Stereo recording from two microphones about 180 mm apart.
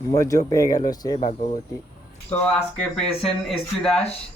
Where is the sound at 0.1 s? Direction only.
15° left (ahead or behind).